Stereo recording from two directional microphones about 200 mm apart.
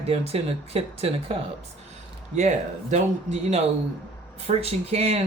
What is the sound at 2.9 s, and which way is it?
Speech, 35° right (ahead or behind).